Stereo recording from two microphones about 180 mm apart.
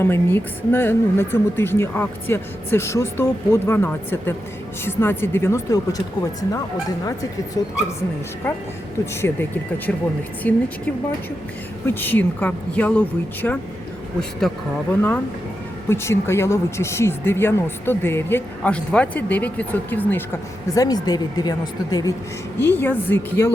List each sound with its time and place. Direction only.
0.0 s speech: 10° left (ahead or behind)
7.0 s speech: 20° left (ahead or behind)
11.9 s speech: 10° left (ahead or behind)